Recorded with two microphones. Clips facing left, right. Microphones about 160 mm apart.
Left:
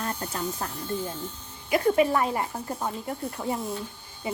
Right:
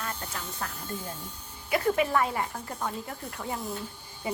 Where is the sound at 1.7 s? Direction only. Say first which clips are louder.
Left 3 dB; 30° left (ahead or behind).